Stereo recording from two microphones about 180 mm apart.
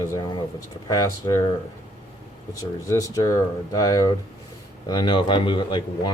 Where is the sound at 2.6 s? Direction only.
15° left (ahead or behind).